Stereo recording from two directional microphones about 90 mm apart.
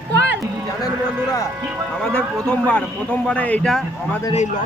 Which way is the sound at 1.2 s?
40° left (ahead or behind).